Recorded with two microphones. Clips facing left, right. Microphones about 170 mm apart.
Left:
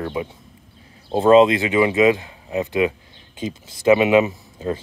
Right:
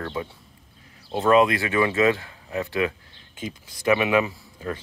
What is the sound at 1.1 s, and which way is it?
Speech, 25° left (ahead or behind).